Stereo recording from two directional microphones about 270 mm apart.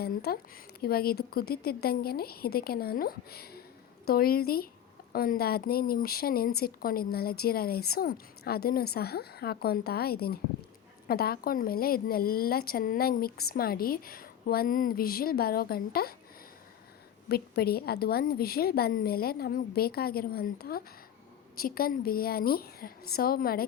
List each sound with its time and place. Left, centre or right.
0.0 s speech: left
17.2 s speech: left